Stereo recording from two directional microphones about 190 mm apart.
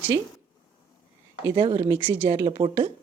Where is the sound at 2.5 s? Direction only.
25° right (ahead or behind).